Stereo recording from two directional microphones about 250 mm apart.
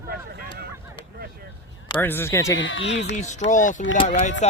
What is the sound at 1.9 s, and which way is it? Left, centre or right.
Speech, centre.